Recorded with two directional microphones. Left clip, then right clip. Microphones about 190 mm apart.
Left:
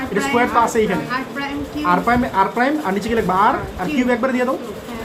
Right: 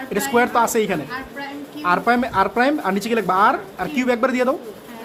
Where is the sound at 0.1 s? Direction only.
60° right (ahead or behind).